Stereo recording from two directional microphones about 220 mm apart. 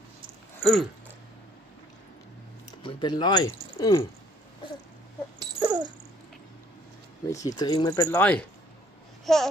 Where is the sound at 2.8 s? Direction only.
20° left (ahead or behind).